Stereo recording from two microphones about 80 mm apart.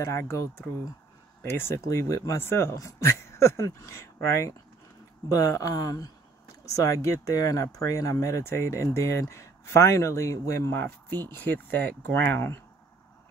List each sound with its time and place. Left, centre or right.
0.0 s speech: left